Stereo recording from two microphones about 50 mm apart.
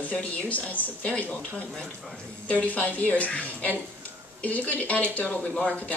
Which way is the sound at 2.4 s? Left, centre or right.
Left.